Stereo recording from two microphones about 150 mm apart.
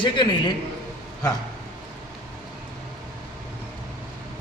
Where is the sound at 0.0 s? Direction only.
30° left (ahead or behind).